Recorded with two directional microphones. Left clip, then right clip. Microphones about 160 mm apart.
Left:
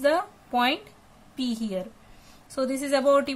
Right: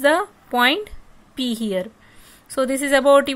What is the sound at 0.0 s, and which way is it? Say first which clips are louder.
Speech: right 6 dB; 45° right (ahead or behind).